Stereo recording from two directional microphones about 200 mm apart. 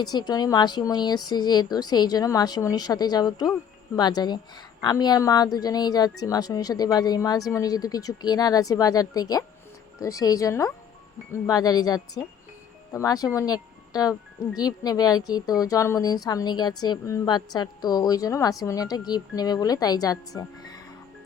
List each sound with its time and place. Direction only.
0.0 s a woman's voice: 20° left (ahead or behind)